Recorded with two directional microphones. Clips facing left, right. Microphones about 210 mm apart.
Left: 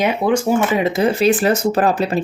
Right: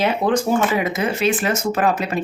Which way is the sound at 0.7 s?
25° left (ahead or behind).